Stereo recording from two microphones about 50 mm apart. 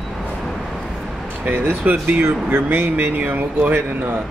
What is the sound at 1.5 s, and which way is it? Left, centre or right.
Speech, right.